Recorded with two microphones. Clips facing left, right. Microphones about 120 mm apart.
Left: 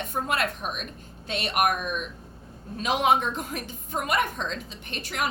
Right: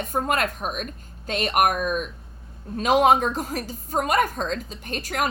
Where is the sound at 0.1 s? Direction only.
45° right (ahead or behind).